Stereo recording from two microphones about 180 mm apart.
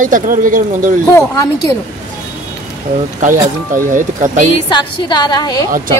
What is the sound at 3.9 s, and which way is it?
Speech, 45° right (ahead or behind).